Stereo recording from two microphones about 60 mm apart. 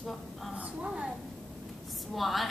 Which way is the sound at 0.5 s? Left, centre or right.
Centre.